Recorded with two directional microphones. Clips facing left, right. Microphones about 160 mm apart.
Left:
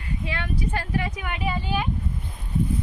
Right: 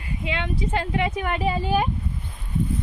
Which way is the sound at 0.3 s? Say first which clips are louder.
Right 3 dB; 20° right (ahead or behind).